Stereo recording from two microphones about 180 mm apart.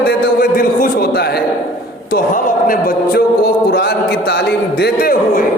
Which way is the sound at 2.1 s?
50° left (ahead or behind).